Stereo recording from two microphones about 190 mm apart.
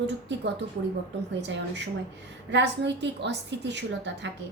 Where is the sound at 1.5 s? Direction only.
65° right (ahead or behind).